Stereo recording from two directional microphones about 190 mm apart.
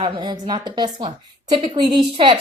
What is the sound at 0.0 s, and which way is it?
A woman's voice, 25° right (ahead or behind).